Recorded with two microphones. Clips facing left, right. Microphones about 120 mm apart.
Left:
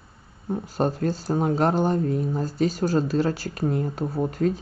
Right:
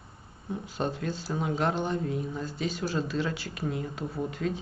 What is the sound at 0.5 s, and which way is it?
Speech, 40° left (ahead or behind).